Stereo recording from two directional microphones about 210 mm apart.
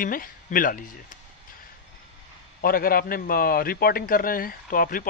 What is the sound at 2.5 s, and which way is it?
A man's voice, 45° left (ahead or behind).